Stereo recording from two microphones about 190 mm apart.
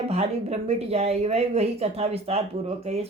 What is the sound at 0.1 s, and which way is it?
Speech, 35° right (ahead or behind).